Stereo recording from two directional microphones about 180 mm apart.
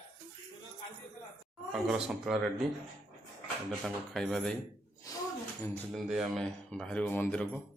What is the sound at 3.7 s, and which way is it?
Speech, centre (ahead or behind).